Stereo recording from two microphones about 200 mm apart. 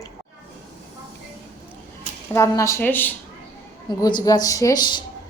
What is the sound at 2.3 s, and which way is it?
Speech, 15° left (ahead or behind).